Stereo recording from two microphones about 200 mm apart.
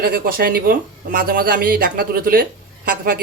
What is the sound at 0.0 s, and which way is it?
Speech, 45° right (ahead or behind).